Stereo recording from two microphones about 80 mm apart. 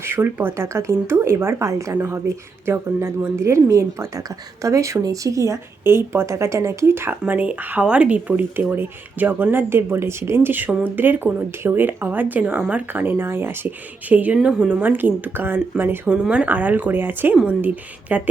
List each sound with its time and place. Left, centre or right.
0.0 s speech: right
0.5 s speech: right
5.8 s speech: right
16.0 s speech: centre